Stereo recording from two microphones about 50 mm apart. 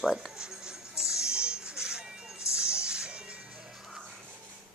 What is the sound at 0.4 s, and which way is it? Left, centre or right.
Music, centre.